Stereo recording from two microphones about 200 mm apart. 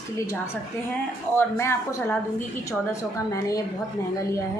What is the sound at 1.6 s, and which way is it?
Speech, 10° left (ahead or behind).